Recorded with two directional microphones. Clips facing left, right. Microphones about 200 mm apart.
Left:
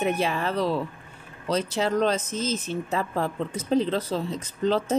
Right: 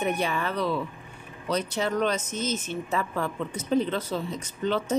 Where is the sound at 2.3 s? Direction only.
90° left.